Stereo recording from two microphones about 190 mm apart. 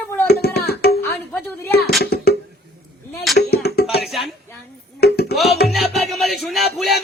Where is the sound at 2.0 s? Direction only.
55° left (ahead or behind).